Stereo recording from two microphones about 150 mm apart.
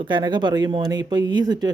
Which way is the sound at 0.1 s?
30° right (ahead or behind).